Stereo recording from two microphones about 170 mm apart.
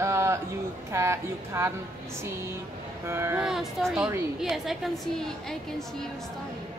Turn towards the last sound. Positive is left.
turn(degrees=0)  # may be behind; listen again after turning